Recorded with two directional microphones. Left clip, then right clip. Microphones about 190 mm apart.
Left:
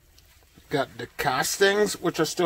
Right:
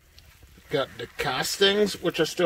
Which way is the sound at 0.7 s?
10° left (ahead or behind).